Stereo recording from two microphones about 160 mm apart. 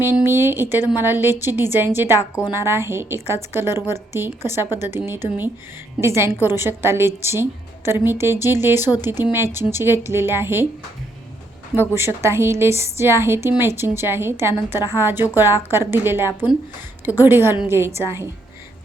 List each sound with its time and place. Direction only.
0.0 s a woman's voice: 15° right (ahead or behind)
2.1 s a woman's voice: 20° left (ahead or behind)
2.5 s a woman's voice: 15° right (ahead or behind)
11.9 s a woman's voice: 15° right (ahead or behind)